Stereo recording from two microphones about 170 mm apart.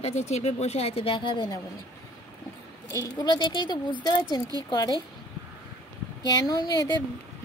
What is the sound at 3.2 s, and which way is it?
Speech, 25° left (ahead or behind).